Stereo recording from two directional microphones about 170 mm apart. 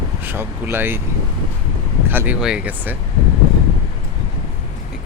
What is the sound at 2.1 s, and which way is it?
Speech, 10° right (ahead or behind).